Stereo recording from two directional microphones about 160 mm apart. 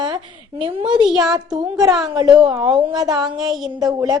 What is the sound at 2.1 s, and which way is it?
A woman's voice, 25° right (ahead or behind).